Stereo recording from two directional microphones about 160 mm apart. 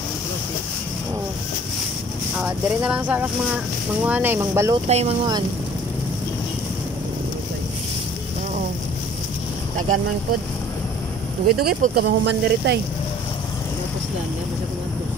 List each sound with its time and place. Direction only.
2.3 s speech: 5° right (ahead or behind)
4.8 s speech: 40° right (ahead or behind)
11.4 s speech: 70° right (ahead or behind); by 12.8 s 90° right